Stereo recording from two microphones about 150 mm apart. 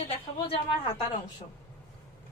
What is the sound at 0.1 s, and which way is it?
Speech, 35° left (ahead or behind).